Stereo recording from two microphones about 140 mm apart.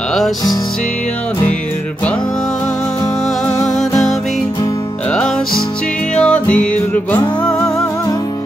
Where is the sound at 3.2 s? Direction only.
Centre (ahead or behind).